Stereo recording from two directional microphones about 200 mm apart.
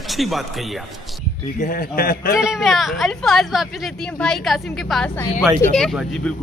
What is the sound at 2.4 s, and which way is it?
Speech, centre (ahead or behind).